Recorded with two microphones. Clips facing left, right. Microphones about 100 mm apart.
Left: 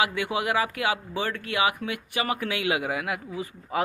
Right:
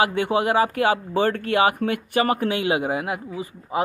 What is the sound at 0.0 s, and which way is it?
Speech, 35° right (ahead or behind).